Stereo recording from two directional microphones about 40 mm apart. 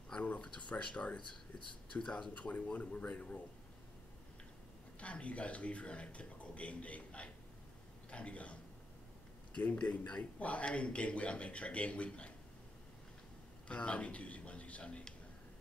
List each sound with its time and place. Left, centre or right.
0.4 s speech: left
2.3 s speech: left
5.0 s a man's voice: left
13.7 s speech: left